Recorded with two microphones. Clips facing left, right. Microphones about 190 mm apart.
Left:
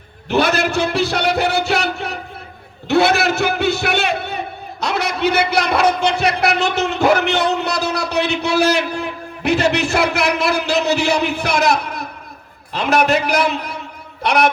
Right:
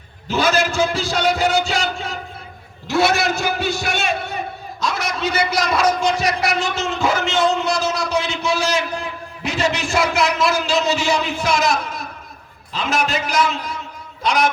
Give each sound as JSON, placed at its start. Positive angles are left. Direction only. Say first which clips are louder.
{"t": 0.3, "sound": "a man's voice", "louder": "left 2 dB", "side_deg": 65}
{"t": 2.8, "sound": "a sound", "louder": "left 3 dB", "side_deg": 65}
{"t": 4.8, "sound": "a man's voice", "louder": "left 4 dB", "side_deg": 65}